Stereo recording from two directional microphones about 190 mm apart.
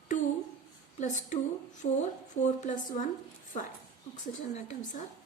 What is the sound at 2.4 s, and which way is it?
Speech, 40° left (ahead or behind).